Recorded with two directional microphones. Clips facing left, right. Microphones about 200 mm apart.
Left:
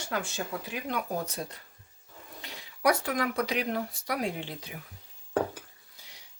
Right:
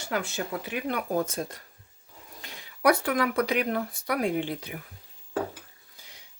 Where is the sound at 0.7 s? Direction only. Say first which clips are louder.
Right 5 dB; 60° right (ahead or behind).